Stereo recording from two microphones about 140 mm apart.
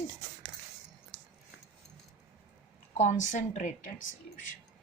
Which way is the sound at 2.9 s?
60° left (ahead or behind).